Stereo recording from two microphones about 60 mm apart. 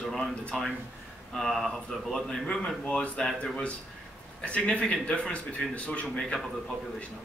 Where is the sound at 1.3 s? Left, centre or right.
Centre.